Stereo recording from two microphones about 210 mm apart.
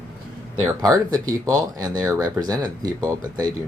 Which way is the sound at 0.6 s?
15° right (ahead or behind).